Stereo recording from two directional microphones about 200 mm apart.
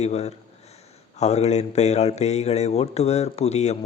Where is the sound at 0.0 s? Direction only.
30° left (ahead or behind).